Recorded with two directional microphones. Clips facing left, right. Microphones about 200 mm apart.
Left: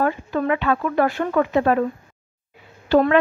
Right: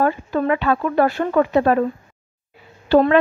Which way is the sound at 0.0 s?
35° right (ahead or behind).